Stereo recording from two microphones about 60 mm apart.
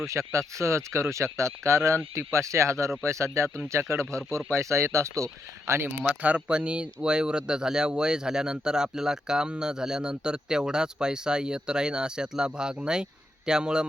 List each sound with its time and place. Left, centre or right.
0.1 s speech: right
4.0 s speech: centre
4.5 s speech: right
6.0 s speech: right